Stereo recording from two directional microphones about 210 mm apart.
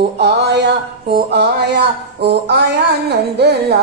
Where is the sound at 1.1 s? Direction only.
55° right (ahead or behind).